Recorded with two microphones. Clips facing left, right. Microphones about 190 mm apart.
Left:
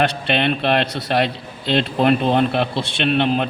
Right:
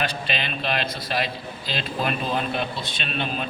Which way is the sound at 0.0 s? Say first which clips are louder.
Left 9 dB; 65° left (ahead or behind).